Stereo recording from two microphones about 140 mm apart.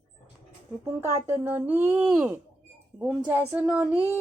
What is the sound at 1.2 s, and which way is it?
Speech, 15° right (ahead or behind).